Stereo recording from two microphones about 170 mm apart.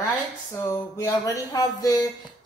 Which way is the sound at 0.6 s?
15° left (ahead or behind).